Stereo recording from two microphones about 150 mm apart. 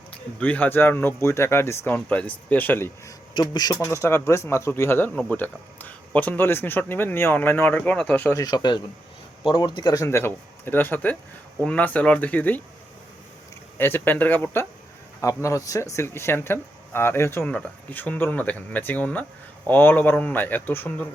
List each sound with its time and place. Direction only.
0.3 s speech: 10° left (ahead or behind)
3.3 s speech: 30° left (ahead or behind); by 8.4 s 10° left (ahead or behind)
8.4 s speech: 25° left (ahead or behind); by 12.6 s 10° left (ahead or behind)
13.7 s speech: 15° left (ahead or behind)